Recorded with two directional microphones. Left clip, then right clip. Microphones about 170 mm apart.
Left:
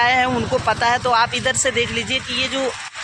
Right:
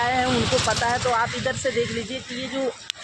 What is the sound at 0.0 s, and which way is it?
Vehicle, 20° left (ahead or behind).